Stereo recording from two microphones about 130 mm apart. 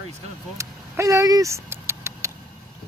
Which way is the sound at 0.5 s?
25° right (ahead or behind).